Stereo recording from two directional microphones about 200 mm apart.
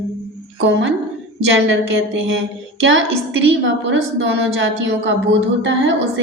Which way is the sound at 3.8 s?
65° right (ahead or behind).